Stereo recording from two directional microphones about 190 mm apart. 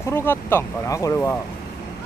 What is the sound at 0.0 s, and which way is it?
Speech, 10° left (ahead or behind).